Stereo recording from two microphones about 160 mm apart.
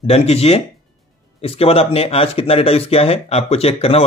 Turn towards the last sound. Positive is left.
turn(degrees=40)  # may be behind; listen again after turning